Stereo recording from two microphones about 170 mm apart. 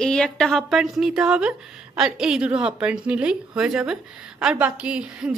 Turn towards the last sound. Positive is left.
turn(degrees=-5)  # may be behind; listen again after turning